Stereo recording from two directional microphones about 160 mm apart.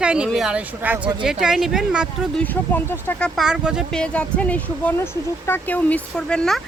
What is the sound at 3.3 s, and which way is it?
Speech, 5° right (ahead or behind).